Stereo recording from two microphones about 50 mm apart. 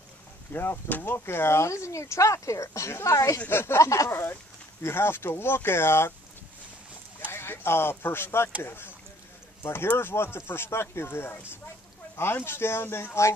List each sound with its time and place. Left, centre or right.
0.5 s speech: left
0.8 s speech: left
1.1 s speech: left
3.4 s speech: left
4.8 s speech: left
7.3 s speech: left